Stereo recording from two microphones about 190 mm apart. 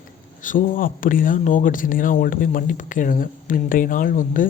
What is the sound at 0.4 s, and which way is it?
Speech, 45° left (ahead or behind).